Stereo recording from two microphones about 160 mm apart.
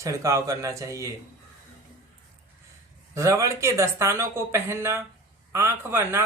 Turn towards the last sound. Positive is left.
turn(degrees=-15)  # may be behind; listen again after turning